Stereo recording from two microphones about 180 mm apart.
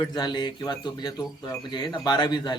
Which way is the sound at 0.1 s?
25° left (ahead or behind).